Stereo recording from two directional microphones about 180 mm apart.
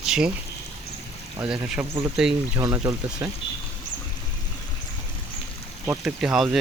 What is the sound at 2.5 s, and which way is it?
Speech, 15° right (ahead or behind).